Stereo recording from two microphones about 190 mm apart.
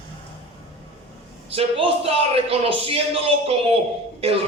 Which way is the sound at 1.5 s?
30° right (ahead or behind).